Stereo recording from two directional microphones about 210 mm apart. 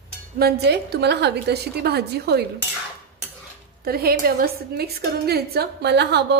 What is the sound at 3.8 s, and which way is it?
A woman's voice, 45° right (ahead or behind).